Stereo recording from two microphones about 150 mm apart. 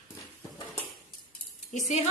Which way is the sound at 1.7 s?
55° left (ahead or behind).